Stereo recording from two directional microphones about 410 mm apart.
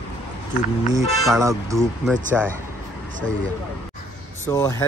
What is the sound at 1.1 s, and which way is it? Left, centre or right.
Speech, centre.